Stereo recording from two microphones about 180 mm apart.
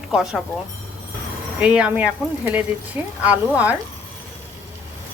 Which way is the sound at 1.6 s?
5° right (ahead or behind).